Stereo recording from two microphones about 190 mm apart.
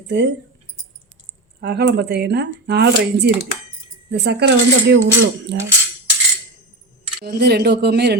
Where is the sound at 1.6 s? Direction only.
60° right (ahead or behind).